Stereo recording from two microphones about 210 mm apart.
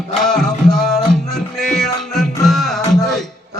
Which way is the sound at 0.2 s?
Centre (ahead or behind).